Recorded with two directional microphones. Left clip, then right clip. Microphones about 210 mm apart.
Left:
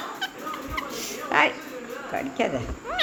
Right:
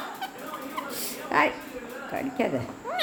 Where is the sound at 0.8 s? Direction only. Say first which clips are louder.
Left 3 dB; 20° right (ahead or behind).